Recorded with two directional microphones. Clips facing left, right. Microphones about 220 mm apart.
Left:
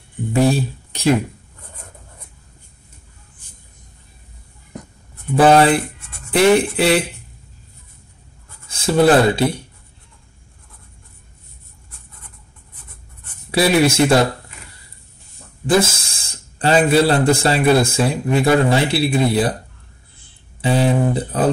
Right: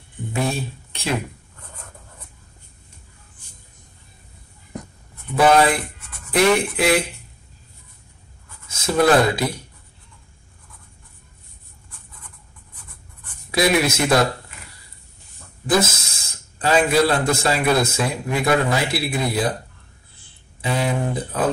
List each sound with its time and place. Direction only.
5.3 s a man's voice: 30° left (ahead or behind)
8.6 s speech: 30° left (ahead or behind)
13.5 s speech: 30° left (ahead or behind)
15.6 s a man's voice: 30° left (ahead or behind)
20.6 s speech: 30° left (ahead or behind)